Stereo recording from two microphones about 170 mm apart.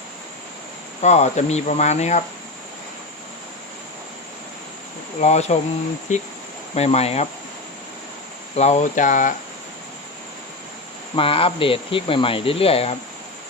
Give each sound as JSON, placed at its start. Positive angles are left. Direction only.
{"t": 1.0, "sound": "speech", "side_deg": 40}
{"t": 5.2, "sound": "speech", "side_deg": 40}
{"t": 8.5, "sound": "speech", "side_deg": 40}
{"t": 11.1, "sound": "speech", "side_deg": 35}